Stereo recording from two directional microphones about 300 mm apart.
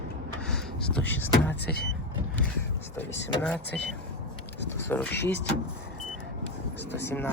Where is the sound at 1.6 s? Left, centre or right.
Left.